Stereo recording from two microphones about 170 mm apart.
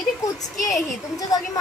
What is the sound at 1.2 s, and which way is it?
Speech, 20° left (ahead or behind).